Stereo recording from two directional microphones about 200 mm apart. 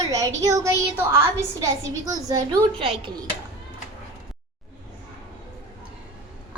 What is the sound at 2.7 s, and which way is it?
Speech, 25° right (ahead or behind).